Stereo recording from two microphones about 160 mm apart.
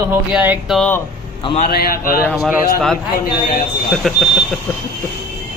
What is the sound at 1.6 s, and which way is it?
Speech, 65° left (ahead or behind).